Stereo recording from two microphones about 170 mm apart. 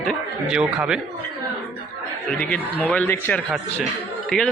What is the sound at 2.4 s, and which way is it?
A man's voice, 5° left (ahead or behind).